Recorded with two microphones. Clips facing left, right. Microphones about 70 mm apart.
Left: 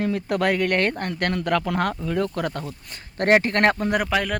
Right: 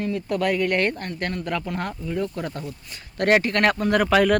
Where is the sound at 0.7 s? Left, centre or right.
Left.